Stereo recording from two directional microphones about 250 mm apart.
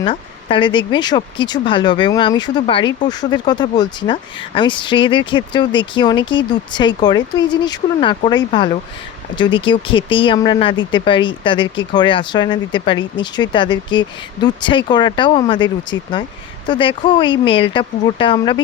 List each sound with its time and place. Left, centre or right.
0.0 s speech: left